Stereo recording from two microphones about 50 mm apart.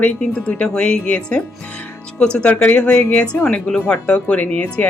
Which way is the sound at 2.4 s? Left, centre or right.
Left.